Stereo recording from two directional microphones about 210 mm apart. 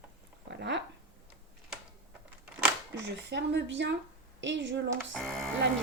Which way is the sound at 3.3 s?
55° right (ahead or behind).